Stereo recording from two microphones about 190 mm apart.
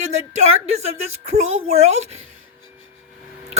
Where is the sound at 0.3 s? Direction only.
35° right (ahead or behind).